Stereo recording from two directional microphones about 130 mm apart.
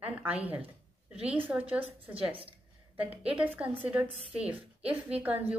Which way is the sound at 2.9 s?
10° right (ahead or behind).